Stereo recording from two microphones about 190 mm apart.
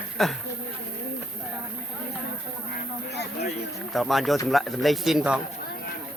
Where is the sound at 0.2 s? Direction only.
Centre (ahead or behind).